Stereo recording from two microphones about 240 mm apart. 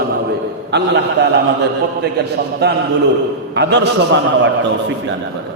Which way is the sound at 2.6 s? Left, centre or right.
Right.